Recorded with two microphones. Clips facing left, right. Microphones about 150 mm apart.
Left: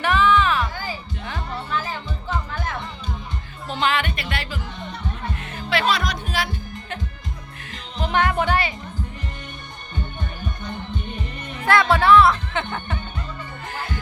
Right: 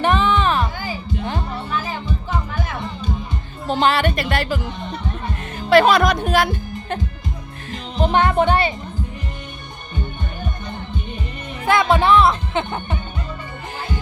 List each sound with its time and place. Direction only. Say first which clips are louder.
0.0 s music: right 1 dB; 25° right (ahead or behind)
3.7 s speech: right 6 dB; 40° right (ahead or behind)
5.6 s speech: right 9 dB; 45° right (ahead or behind)
7.7 s speech: right 6 dB; 30° right (ahead or behind)
11.6 s speech: right 2 dB; 15° right (ahead or behind)